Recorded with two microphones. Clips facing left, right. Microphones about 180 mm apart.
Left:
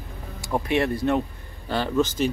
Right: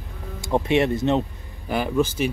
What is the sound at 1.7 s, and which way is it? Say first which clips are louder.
Speech: right 1 dB; 10° right (ahead or behind).